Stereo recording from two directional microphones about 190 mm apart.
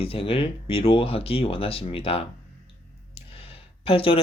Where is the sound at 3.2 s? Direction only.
30° left (ahead or behind).